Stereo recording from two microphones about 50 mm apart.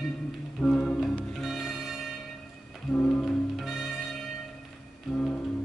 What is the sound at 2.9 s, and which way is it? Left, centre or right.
Music, centre.